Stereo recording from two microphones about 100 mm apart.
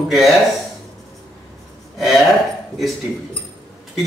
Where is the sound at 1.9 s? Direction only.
Centre (ahead or behind).